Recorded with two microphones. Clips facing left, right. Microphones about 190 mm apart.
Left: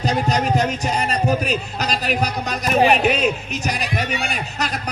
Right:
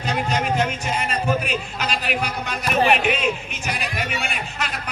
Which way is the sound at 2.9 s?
40° left (ahead or behind).